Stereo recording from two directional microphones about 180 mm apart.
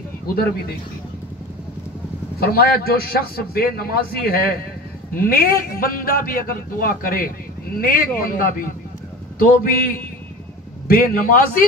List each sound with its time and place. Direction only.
2.4 s a man's voice: 60° left (ahead or behind)